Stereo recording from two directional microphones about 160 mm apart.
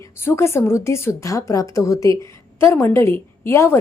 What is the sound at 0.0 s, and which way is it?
A woman's voice, 15° left (ahead or behind).